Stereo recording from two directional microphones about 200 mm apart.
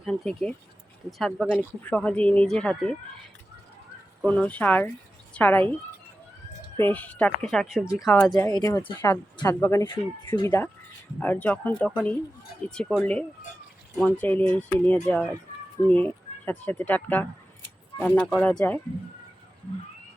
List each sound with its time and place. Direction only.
0.0 s speech: 5° left (ahead or behind)
4.3 s a woman's voice: 5° left (ahead or behind)
6.7 s speech: 10° left (ahead or behind)
8.4 s speech: 20° left (ahead or behind)